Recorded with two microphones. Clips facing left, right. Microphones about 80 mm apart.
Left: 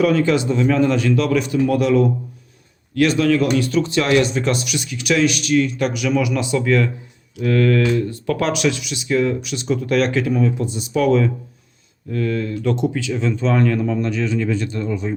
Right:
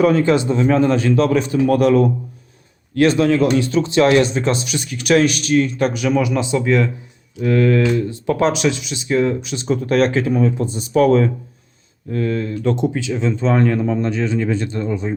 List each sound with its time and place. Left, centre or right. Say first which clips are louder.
0.0 s speech: right 2 dB; right
2.9 s speech: right 2 dB; right
12.1 s speech: right 1 dB; right